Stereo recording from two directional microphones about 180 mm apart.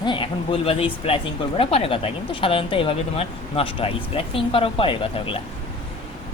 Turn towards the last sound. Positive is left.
turn(degrees=30)  # may be behind; listen again after turning